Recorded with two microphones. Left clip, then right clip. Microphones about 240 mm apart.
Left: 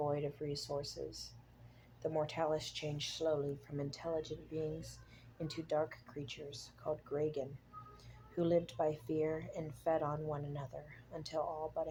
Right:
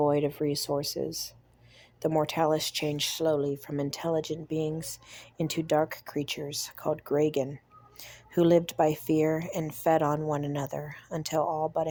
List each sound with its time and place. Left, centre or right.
0.0 s speech: right